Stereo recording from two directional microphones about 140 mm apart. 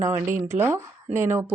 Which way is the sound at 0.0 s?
20° right (ahead or behind).